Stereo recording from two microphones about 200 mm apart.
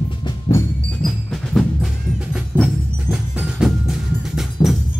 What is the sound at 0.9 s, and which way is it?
Music, centre (ahead or behind).